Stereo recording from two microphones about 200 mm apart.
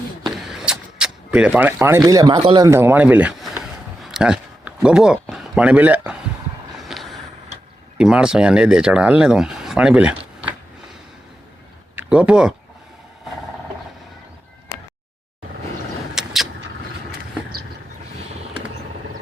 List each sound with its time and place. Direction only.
0.3 s power windows: centre (ahead or behind); by 2.6 s 25° right (ahead or behind)
2.6 s speech: 10° right (ahead or behind)
6.7 s a sound: centre (ahead or behind)
7.9 s speech: 5° right (ahead or behind)
11.9 s speech: 5° right (ahead or behind)
16.1 s vehicle: centre (ahead or behind)